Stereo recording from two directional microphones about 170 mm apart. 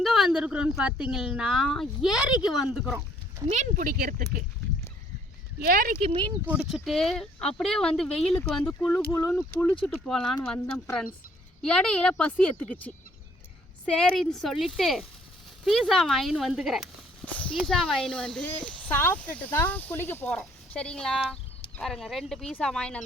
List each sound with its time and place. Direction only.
0.0 s speech: centre (ahead or behind)
3.5 s speech: 50° right (ahead or behind)
5.5 s speech: 60° right (ahead or behind)
6.0 s speech: 35° right (ahead or behind)
6.4 s speech: 5° right (ahead or behind)
11.6 s speech: 5° left (ahead or behind)
13.8 s speech: 5° left (ahead or behind)